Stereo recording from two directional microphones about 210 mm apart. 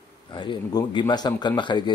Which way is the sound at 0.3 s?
20° left (ahead or behind).